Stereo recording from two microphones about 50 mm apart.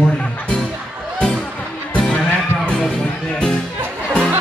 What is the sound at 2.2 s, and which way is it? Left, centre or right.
Music, centre.